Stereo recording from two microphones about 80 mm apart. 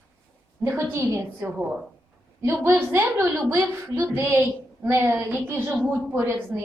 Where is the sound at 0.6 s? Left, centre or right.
Right.